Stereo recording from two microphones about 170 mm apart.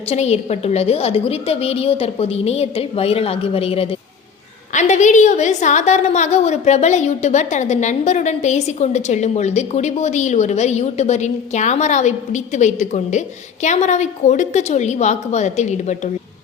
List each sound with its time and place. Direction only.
0.1 s a woman's voice: 40° left (ahead or behind)